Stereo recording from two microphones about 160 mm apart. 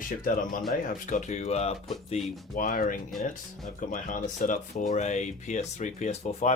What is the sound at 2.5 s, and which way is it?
Speech, 60° left (ahead or behind).